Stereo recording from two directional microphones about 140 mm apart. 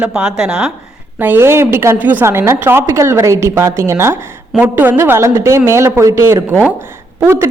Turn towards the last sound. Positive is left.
turn(degrees=-15)  # may be behind; listen again after turning